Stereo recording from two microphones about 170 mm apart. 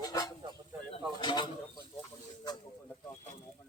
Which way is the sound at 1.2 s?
25° left (ahead or behind).